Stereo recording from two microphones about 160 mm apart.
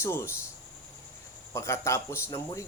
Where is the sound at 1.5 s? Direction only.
20° left (ahead or behind).